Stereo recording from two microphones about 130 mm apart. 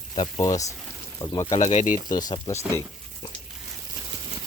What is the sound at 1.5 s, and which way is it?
Speech, 60° left (ahead or behind).